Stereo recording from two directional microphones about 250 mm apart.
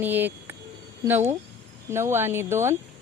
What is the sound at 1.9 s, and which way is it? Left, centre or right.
Speech, centre.